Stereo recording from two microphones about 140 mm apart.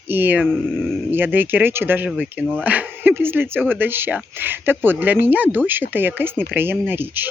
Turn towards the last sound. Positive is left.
turn(degrees=-15)  # may be behind; listen again after turning